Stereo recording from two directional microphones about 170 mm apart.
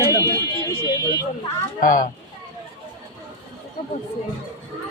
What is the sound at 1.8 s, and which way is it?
Speech, 55° left (ahead or behind).